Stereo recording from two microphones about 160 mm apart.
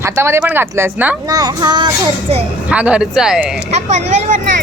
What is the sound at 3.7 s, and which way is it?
Speech, 45° right (ahead or behind).